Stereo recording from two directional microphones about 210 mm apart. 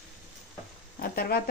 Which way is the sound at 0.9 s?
45° left (ahead or behind).